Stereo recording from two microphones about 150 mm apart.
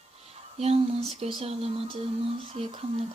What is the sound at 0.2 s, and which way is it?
Speech, 45° right (ahead or behind).